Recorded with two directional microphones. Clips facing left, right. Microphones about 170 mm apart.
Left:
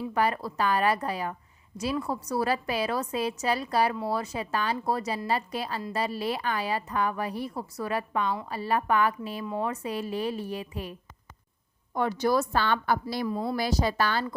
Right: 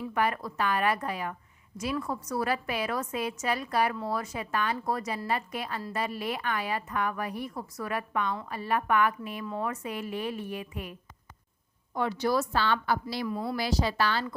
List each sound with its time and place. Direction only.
0.0 s a woman's voice: 30° left (ahead or behind)
11.9 s a woman's voice: 45° left (ahead or behind)
13.2 s speech: 30° left (ahead or behind)
13.6 s a woman's voice: 45° left (ahead or behind)